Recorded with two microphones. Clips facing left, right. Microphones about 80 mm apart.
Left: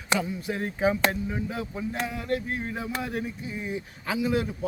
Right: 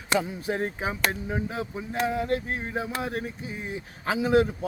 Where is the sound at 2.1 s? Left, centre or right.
Right.